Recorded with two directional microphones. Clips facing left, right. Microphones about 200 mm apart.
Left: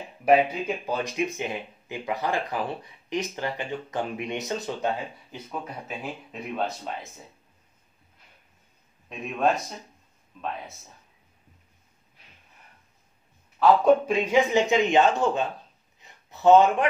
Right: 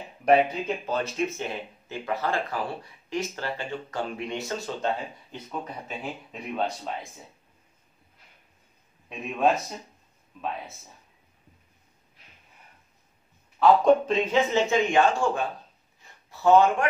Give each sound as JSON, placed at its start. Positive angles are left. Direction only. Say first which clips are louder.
{"t": 0.2, "sound": "speech", "louder": "even", "side_deg": 5}
{"t": 9.1, "sound": "speech", "louder": "right 1 dB", "side_deg": 0}
{"t": 13.6, "sound": "speech", "louder": "even", "side_deg": 10}
{"t": 16.0, "sound": "a sound", "louder": "left 3 dB", "side_deg": 20}